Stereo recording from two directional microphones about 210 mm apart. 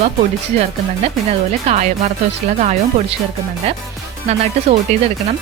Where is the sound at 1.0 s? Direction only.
30° right (ahead or behind).